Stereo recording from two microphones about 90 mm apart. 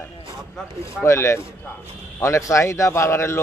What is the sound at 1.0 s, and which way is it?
A man's voice, 30° left (ahead or behind).